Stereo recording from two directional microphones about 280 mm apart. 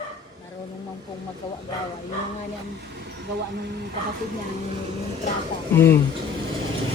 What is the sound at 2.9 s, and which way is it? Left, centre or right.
Vehicle, right.